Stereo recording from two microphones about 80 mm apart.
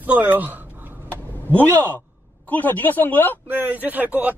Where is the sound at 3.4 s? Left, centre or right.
Right.